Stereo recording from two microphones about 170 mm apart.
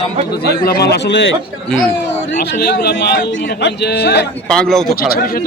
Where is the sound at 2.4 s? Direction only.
70° left (ahead or behind).